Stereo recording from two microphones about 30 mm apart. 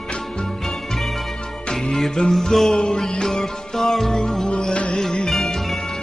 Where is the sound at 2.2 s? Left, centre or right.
Left.